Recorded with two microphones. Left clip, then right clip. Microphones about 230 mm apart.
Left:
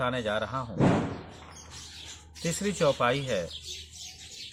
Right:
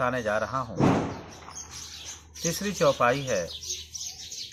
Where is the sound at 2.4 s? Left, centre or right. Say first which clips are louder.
Right 2 dB; left.